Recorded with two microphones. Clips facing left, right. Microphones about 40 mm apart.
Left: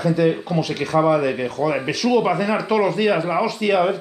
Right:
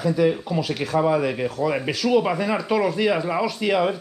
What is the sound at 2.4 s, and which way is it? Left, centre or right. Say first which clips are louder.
Speech: left 2 dB; centre.